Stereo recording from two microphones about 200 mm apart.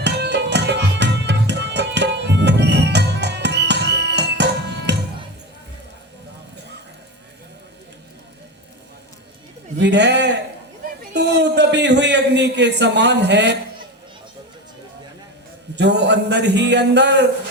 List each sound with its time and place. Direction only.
0.0 s music: 60° right (ahead or behind)
9.7 s a man's voice: 60° right (ahead or behind)
15.7 s a man's voice: 60° right (ahead or behind)